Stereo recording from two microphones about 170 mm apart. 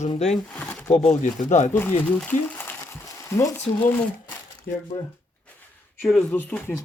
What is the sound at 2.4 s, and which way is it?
Crumpling, 10° left (ahead or behind).